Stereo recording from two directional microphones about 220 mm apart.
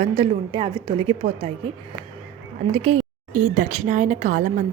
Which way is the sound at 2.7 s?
25° right (ahead or behind).